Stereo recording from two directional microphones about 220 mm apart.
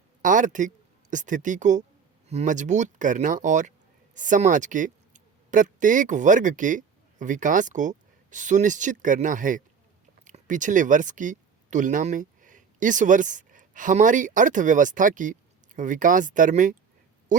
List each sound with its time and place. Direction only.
0.2 s a man's voice: 35° right (ahead or behind)